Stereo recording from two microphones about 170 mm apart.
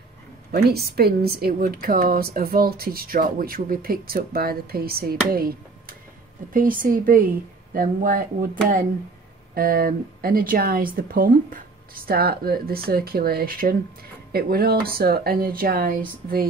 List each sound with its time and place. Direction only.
0.5 s a woman's voice: 65° right (ahead or behind)